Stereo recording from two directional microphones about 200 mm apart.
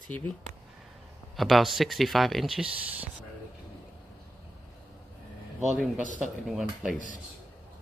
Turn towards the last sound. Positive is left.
turn(degrees=-5)  # may be behind; listen again after turning